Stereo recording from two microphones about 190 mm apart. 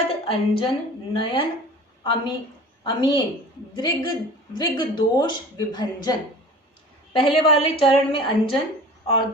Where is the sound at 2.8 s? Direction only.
25° left (ahead or behind).